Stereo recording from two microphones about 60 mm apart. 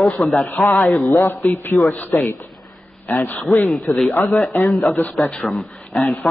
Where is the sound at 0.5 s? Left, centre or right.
Left.